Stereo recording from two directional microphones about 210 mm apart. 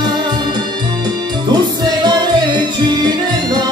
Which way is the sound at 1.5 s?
20° right (ahead or behind).